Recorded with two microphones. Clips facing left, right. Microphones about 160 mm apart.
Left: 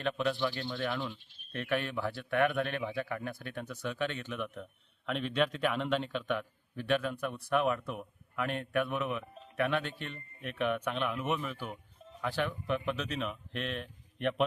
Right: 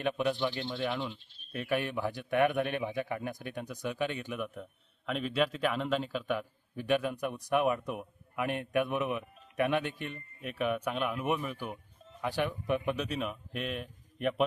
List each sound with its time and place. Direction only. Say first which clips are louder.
0.0 s a man's voice: right 1 dB; 15° right (ahead or behind)